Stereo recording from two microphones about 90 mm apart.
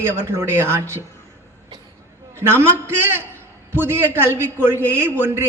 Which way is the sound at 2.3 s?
30° right (ahead or behind).